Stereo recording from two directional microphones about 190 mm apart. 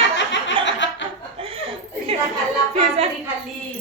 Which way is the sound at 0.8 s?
70° left (ahead or behind).